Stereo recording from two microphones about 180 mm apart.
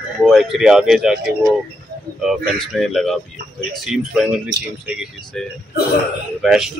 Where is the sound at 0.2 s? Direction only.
Centre (ahead or behind).